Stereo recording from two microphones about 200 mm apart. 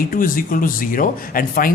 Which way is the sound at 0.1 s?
45° left (ahead or behind).